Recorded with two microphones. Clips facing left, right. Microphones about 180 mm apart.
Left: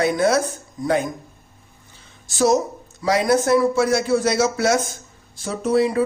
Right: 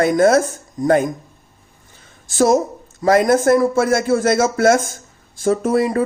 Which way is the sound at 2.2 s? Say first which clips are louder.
Right 3 dB; 50° right (ahead or behind).